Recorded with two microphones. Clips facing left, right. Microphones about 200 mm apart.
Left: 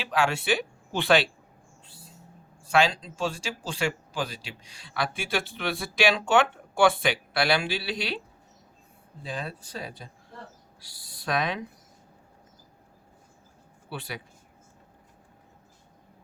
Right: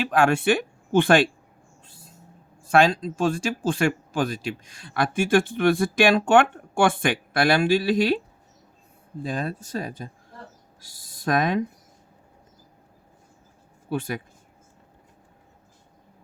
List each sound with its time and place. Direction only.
0.0 s speech: 50° right (ahead or behind)
2.7 s speech: 45° right (ahead or behind)
9.2 s speech: 45° right (ahead or behind)
13.9 s speech: 45° right (ahead or behind)